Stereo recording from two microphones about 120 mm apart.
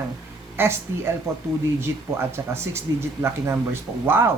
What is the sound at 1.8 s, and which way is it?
Speech, 20° right (ahead or behind).